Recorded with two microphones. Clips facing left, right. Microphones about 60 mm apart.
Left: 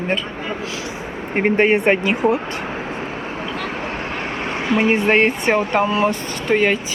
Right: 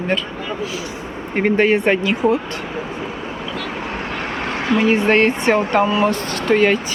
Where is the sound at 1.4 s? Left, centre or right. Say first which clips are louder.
Even; left.